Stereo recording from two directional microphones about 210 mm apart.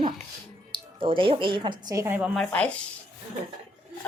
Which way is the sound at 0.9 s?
25° right (ahead or behind).